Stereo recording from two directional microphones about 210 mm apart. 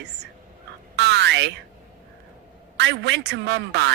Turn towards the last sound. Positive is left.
turn(degrees=-55)  # may be behind; listen again after turning